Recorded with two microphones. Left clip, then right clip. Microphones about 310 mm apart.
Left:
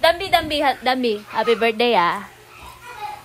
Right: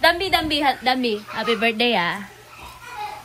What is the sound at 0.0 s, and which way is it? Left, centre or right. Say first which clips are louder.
A woman's voice: left 1 dB; left.